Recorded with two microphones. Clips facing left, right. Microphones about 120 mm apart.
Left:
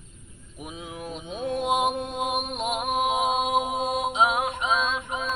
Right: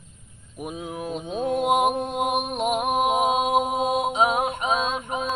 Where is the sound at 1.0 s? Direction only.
45° right (ahead or behind).